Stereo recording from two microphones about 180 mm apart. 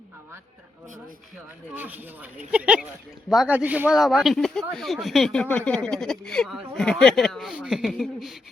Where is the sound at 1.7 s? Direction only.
10° right (ahead or behind).